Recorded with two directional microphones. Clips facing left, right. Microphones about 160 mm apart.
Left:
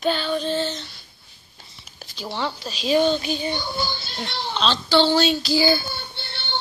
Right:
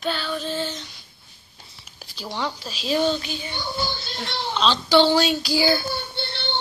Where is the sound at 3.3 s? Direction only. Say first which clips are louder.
Left 7 dB; 20° left (ahead or behind).